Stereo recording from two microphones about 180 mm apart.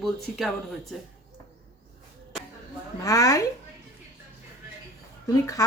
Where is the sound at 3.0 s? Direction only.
20° left (ahead or behind).